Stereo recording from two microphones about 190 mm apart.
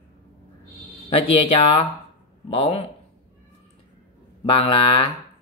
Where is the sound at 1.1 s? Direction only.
30° left (ahead or behind).